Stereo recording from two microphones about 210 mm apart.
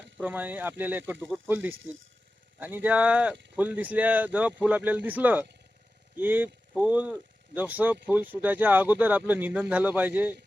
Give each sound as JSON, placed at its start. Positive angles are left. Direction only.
{"t": 0.2, "sound": "speech", "side_deg": -10}
{"t": 1.7, "sound": "speech", "side_deg": -65}
{"t": 2.6, "sound": "speech", "side_deg": -10}